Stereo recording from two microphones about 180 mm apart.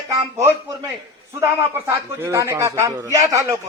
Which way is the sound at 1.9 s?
15° right (ahead or behind).